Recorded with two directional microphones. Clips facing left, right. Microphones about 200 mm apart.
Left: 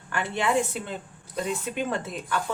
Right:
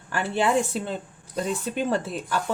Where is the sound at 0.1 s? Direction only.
35° right (ahead or behind).